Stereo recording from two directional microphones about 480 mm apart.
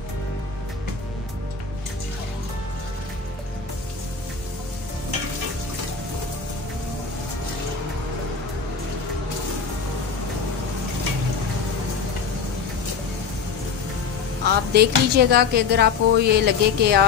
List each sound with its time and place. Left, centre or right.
14.4 s speech: centre